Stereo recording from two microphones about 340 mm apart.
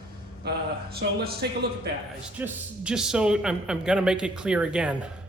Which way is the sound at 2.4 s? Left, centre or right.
Centre.